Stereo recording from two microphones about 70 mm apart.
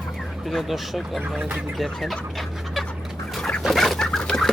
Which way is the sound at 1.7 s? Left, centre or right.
Centre.